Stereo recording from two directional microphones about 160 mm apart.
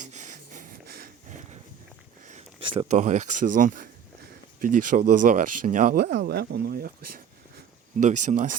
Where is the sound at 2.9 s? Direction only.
50° right (ahead or behind); by 7.2 s 65° right (ahead or behind).